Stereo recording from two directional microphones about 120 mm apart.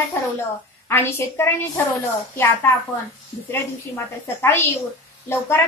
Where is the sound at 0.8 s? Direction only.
20° left (ahead or behind).